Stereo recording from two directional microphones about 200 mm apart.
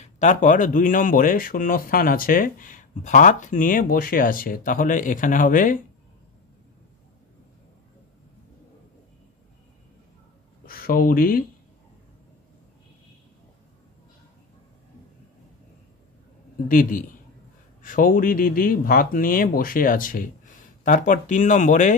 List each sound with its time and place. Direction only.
0.0 s speech: 40° left (ahead or behind)
10.6 s speech: 45° left (ahead or behind)
16.6 s speech: 40° left (ahead or behind)